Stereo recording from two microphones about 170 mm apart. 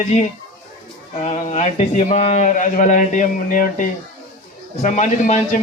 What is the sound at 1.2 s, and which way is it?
A man's voice, 40° left (ahead or behind).